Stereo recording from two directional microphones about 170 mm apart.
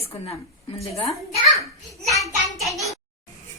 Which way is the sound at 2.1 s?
20° right (ahead or behind).